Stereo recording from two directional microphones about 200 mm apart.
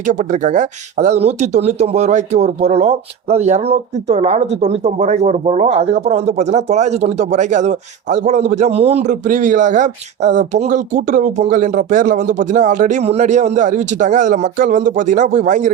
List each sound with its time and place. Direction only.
0.1 s speech: 40° right (ahead or behind)